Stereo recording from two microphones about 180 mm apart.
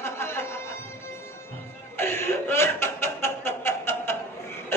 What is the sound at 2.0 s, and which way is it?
Snicker, 10° left (ahead or behind).